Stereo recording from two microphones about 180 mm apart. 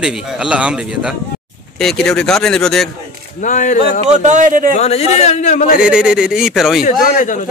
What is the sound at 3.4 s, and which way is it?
Speech, 45° left (ahead or behind).